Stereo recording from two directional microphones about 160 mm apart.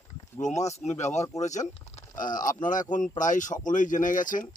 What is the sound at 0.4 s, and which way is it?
Speech, 45° left (ahead or behind).